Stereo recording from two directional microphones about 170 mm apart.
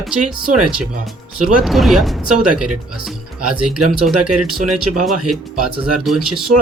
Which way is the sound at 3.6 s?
5° right (ahead or behind).